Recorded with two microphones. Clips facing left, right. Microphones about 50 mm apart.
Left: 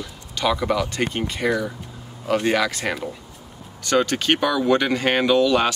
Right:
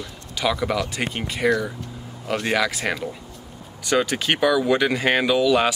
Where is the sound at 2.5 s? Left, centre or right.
Centre.